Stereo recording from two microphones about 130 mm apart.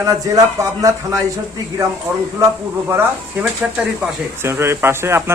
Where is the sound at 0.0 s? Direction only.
25° right (ahead or behind).